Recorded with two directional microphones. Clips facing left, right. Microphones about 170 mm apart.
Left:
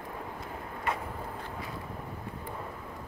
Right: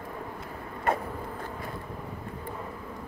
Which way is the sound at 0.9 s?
50° right (ahead or behind).